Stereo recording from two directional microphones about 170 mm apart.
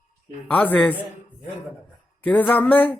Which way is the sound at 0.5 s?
10° left (ahead or behind).